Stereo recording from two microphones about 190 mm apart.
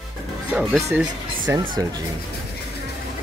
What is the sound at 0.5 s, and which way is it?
Speech, 5° right (ahead or behind).